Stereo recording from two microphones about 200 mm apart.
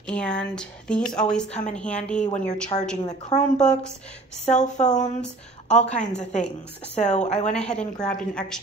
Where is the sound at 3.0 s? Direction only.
35° left (ahead or behind).